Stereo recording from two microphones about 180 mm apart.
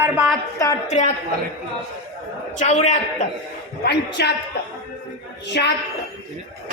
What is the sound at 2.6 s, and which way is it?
Speech, 40° left (ahead or behind).